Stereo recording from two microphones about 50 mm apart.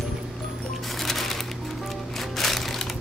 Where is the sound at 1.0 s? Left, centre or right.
Centre.